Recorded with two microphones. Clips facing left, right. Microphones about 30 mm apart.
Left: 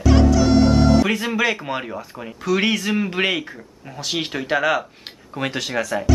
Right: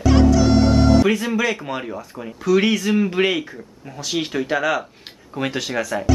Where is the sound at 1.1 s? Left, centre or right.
Centre.